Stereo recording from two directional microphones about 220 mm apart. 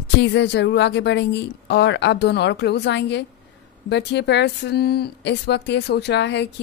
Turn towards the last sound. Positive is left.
turn(degrees=50)  # may be behind; listen again after turning